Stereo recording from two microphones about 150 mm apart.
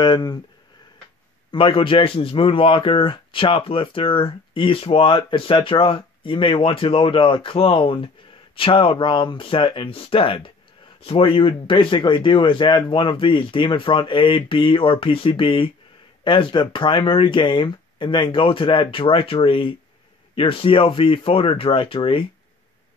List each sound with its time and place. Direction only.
0.0 s speech: 30° left (ahead or behind)
1.5 s speech: 35° left (ahead or behind)